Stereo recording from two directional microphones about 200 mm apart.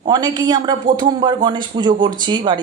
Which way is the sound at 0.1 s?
20° right (ahead or behind).